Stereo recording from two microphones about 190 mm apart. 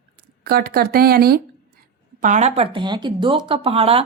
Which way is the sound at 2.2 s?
40° right (ahead or behind).